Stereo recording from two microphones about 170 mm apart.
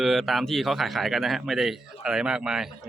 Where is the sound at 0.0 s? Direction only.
Centre (ahead or behind).